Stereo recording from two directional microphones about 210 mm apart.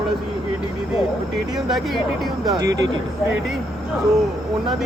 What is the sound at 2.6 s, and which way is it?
Speech, 15° right (ahead or behind).